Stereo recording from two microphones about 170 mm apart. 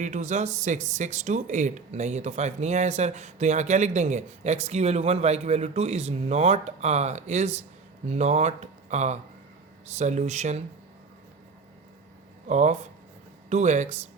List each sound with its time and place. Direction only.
0.0 s speech: 45° right (ahead or behind)
12.5 s speech: 45° right (ahead or behind)